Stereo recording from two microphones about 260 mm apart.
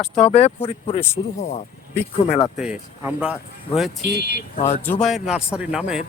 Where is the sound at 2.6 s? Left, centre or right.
Centre.